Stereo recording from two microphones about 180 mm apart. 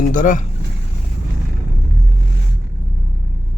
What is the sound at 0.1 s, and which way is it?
Speech, 45° left (ahead or behind).